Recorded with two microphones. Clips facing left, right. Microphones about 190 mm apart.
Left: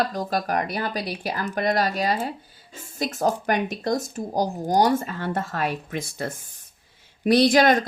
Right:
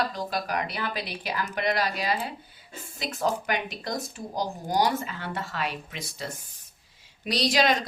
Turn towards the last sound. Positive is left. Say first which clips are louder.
# left 7 dB
turn(degrees=50)  # may be behind; listen again after turning